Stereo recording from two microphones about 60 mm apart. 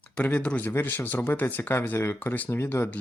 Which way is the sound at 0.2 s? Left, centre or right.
Left.